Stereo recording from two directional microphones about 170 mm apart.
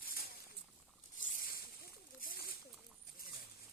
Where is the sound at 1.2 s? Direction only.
50° left (ahead or behind).